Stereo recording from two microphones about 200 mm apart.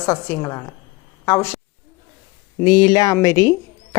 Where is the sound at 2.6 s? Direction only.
20° left (ahead or behind).